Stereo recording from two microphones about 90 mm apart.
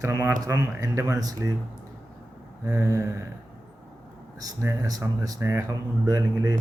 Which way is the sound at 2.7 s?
30° right (ahead or behind).